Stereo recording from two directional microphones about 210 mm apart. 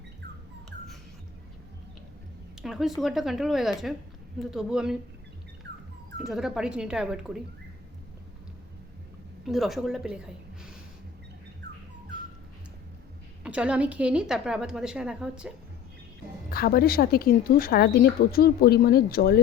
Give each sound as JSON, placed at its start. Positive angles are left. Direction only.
{"t": 2.6, "sound": "a woman's voice", "side_deg": 0}
{"t": 5.7, "sound": "dog", "side_deg": -55}
{"t": 6.1, "sound": "a woman's voice", "side_deg": 0}
{"t": 9.5, "sound": "a woman's voice", "side_deg": 0}
{"t": 11.6, "sound": "dog", "side_deg": -55}
{"t": 13.4, "sound": "a woman's voice", "side_deg": -5}
{"t": 16.5, "sound": "a woman's voice", "side_deg": 45}